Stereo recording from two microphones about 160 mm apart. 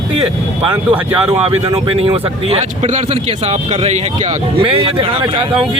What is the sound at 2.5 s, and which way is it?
Speech, 45° right (ahead or behind).